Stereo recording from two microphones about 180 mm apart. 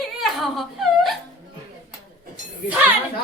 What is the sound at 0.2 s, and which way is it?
Whimper, centre (ahead or behind).